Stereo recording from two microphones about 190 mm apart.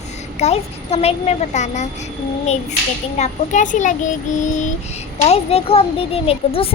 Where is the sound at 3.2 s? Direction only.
40° left (ahead or behind).